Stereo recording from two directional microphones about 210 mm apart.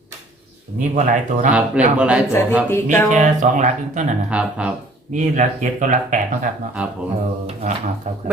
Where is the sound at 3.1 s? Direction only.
35° right (ahead or behind).